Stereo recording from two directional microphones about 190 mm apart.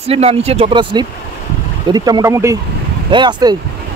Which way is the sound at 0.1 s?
35° right (ahead or behind).